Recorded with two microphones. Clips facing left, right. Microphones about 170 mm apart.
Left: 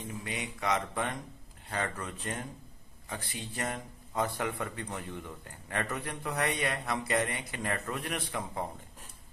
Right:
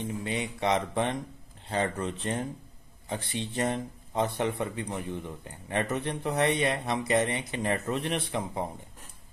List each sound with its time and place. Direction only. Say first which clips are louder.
0.0 s a man's voice: right 6 dB; 30° right (ahead or behind)